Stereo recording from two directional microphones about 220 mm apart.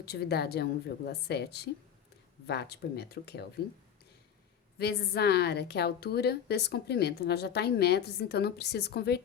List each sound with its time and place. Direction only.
0.0 s a woman's voice: 45° left (ahead or behind)
4.8 s a woman's voice: 45° left (ahead or behind)